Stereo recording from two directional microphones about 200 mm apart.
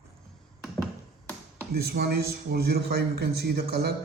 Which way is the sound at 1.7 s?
50° right (ahead or behind).